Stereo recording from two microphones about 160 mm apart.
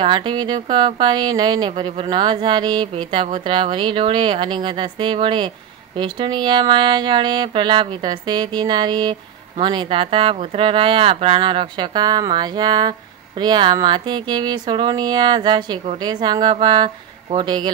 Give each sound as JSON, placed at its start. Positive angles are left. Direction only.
{"t": 0.0, "sound": "speech", "side_deg": -30}